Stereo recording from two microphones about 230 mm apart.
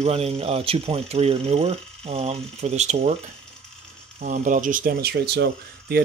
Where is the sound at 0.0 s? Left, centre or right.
Right.